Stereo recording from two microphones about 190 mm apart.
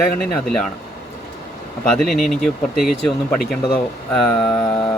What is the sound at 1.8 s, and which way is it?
Speech, 5° left (ahead or behind).